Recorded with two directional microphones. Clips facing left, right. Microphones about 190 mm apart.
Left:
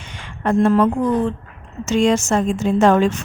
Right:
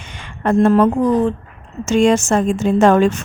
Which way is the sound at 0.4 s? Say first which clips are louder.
Right 3 dB; 50° right (ahead or behind).